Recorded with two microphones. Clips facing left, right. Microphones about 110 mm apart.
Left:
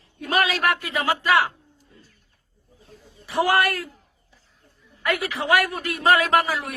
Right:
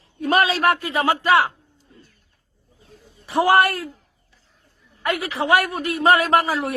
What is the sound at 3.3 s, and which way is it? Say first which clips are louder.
Speech: right 4 dB; 30° right (ahead or behind).